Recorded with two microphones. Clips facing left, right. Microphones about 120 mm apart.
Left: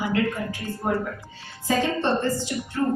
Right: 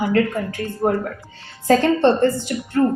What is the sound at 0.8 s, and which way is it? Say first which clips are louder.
Speech: right 6 dB; 45° right (ahead or behind).